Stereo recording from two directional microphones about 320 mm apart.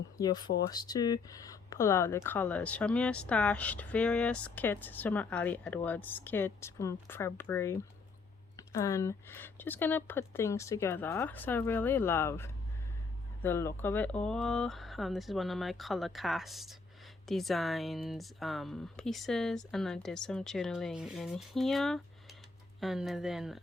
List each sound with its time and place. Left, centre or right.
0.2 s speech: centre